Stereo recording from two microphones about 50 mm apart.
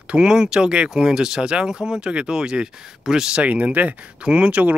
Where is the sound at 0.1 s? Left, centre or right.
Centre.